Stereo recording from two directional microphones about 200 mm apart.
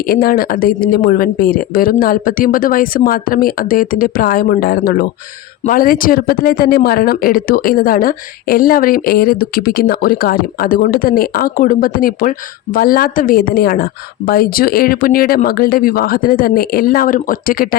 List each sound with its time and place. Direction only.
0.1 s speech: 45° left (ahead or behind)